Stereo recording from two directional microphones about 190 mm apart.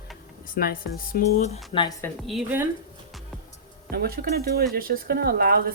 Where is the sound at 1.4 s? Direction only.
35° left (ahead or behind).